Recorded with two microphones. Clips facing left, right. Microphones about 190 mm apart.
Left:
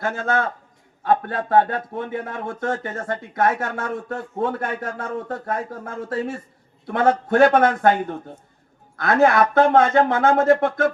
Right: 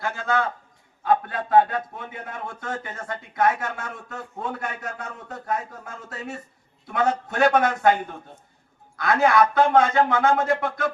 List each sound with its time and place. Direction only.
0.0 s a man's voice: 50° left (ahead or behind)